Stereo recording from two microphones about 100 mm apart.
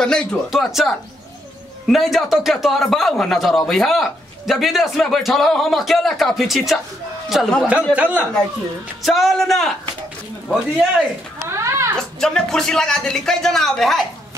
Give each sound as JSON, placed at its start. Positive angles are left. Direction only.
{"t": 0.0, "sound": "speech", "side_deg": 10}
{"t": 0.5, "sound": "a man's voice", "side_deg": 0}
{"t": 7.9, "sound": "speech", "side_deg": -15}
{"t": 9.0, "sound": "a man's voice", "side_deg": 0}
{"t": 11.4, "sound": "a sound", "side_deg": -30}
{"t": 12.2, "sound": "a man's voice", "side_deg": 5}